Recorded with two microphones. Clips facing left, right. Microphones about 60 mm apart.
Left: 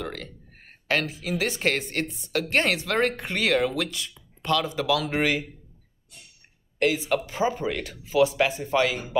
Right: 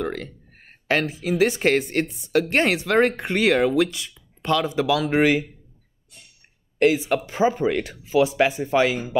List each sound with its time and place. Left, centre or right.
0.0 s speech: centre
6.8 s speech: centre